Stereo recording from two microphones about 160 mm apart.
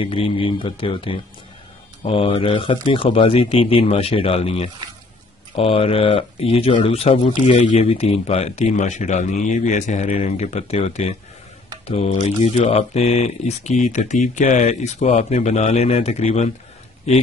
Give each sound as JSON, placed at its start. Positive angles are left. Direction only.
{"t": 0.0, "sound": "speech", "side_deg": 35}